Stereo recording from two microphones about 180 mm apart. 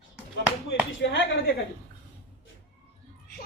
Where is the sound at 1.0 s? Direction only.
80° left.